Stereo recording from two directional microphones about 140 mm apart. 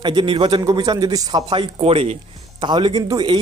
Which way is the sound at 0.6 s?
25° right (ahead or behind).